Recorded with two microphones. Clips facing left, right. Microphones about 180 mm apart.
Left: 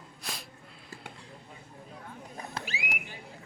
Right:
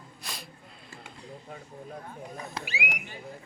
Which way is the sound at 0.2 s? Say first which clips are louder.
Left 1 dB; centre (ahead or behind).